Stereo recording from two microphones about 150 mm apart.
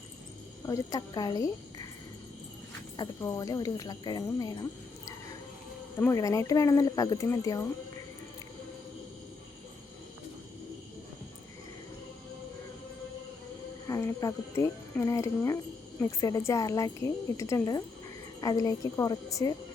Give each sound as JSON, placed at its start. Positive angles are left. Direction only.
{"t": 0.6, "sound": "speech", "side_deg": 20}
{"t": 3.0, "sound": "a woman's voice", "side_deg": 20}
{"t": 6.0, "sound": "a woman's voice", "side_deg": 20}
{"t": 13.8, "sound": "a woman's voice", "side_deg": 20}